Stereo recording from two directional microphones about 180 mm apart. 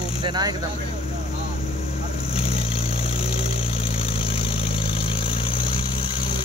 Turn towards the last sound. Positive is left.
turn(degrees=30)  # may be behind; listen again after turning